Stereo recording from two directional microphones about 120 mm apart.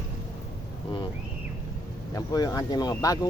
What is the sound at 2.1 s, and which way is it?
Speech, 30° left (ahead or behind).